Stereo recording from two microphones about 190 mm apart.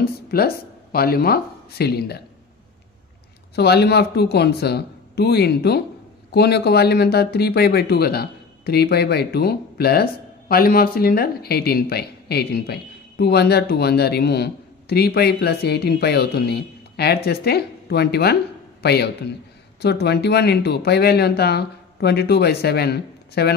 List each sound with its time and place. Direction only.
0.0 s a sound: 55° left (ahead or behind)
0.9 s speech: 55° left (ahead or behind)
3.5 s speech: 60° left (ahead or behind)